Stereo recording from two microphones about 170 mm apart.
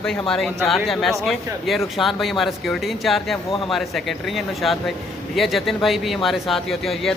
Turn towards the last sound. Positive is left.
turn(degrees=0)  # may be behind; listen again after turning